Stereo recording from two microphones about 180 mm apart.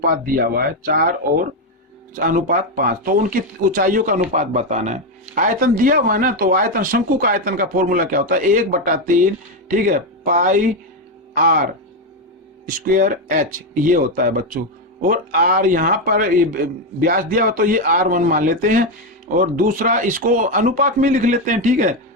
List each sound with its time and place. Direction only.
0.0 s speech: 55° right (ahead or behind)